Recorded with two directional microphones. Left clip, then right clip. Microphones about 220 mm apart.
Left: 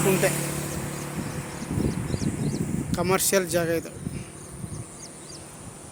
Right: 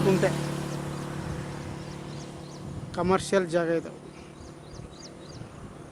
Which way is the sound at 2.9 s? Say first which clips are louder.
Left 1 dB; 10° left (ahead or behind).